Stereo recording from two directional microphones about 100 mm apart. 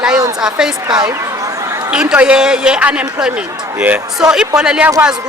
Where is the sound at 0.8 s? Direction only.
40° right (ahead or behind).